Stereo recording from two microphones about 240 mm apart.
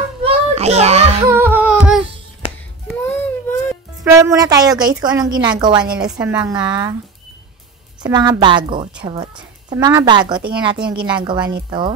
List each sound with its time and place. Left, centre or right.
0.2 s children playing: right
1.3 s music: centre
3.0 s baby cry: centre
4.0 s a woman's voice: centre
8.0 s a woman's voice: centre